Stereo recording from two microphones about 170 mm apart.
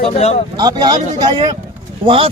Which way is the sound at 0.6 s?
25° right (ahead or behind).